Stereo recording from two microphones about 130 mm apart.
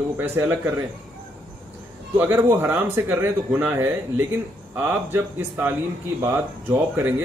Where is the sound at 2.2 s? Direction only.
15° right (ahead or behind).